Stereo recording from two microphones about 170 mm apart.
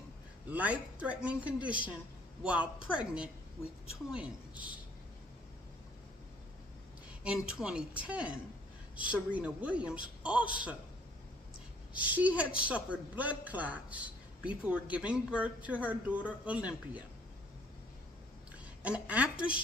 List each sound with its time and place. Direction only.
0.5 s a woman's voice: 10° right (ahead or behind)
7.4 s a woman's voice: 5° right (ahead or behind)
12.0 s a woman's voice: 10° right (ahead or behind)
18.8 s a woman's voice: 10° right (ahead or behind)